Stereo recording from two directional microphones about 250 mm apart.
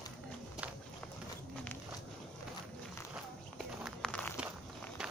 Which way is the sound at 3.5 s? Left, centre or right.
Centre.